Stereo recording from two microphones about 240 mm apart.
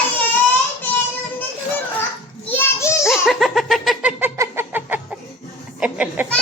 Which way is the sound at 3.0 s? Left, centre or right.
Centre.